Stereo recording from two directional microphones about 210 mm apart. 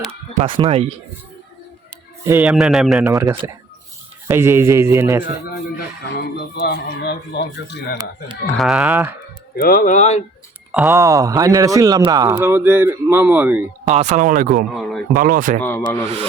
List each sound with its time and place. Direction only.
0.1 s speech: 25° right (ahead or behind)
2.2 s a man's voice: 10° right (ahead or behind)
3.1 s speech: 15° right (ahead or behind)
5.5 s speech: 50° left (ahead or behind)
8.5 s a man's voice: centre (ahead or behind)
9.6 s speech: 40° left (ahead or behind)
10.7 s speech: 10° right (ahead or behind)
13.8 s speech: 35° right (ahead or behind)
14.8 s a man's voice: centre (ahead or behind)
15.1 s speech: 40° right (ahead or behind)
15.6 s speech: 10° left (ahead or behind)